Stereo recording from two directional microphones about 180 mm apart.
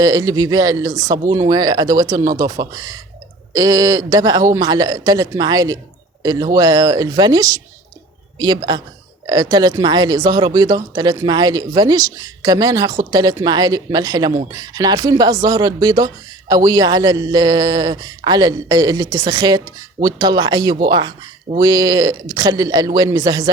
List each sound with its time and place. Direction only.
0.0 s speech: 20° right (ahead or behind)